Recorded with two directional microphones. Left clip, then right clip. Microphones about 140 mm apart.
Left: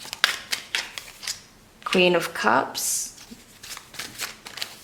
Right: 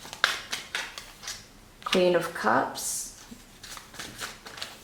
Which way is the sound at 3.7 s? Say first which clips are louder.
Left 4 dB; 20° left (ahead or behind).